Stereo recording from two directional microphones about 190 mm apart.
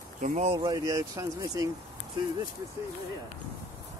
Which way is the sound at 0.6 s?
20° right (ahead or behind).